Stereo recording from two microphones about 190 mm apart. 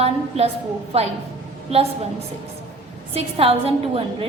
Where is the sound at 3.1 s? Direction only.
30° right (ahead or behind).